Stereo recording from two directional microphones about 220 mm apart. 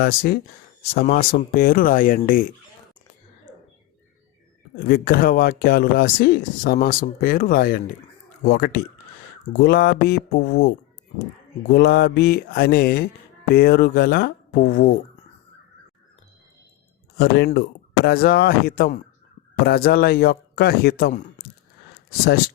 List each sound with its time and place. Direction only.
0.0 s speech: 45° left (ahead or behind)
4.9 s speech: 40° left (ahead or behind)
11.7 s speech: 45° left (ahead or behind)
17.2 s speech: 50° left (ahead or behind)